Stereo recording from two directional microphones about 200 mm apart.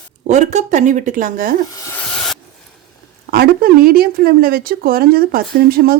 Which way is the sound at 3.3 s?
45° right (ahead or behind).